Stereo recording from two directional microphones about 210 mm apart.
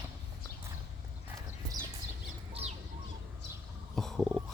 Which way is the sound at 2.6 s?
25° right (ahead or behind).